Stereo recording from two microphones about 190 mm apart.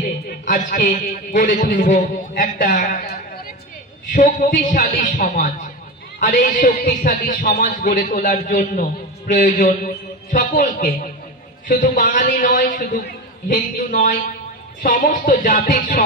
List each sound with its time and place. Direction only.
0.5 s a man's voice: 45° left (ahead or behind)
4.1 s a man's voice: 40° left (ahead or behind)